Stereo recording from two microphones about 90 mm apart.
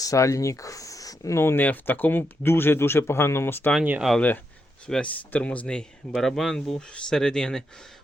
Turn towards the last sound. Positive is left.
turn(degrees=10)  # may be behind; listen again after turning